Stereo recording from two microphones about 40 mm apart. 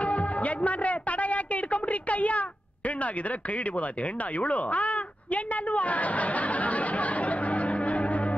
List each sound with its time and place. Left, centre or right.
0.0 s music: left
3.0 s speech: left
4.4 s a sound: left